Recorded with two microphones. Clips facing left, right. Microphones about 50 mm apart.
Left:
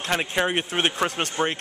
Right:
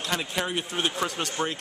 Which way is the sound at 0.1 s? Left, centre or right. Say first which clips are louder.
Left 6 dB; left.